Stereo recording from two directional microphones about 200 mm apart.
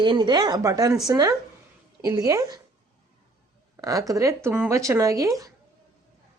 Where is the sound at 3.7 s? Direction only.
15° right (ahead or behind).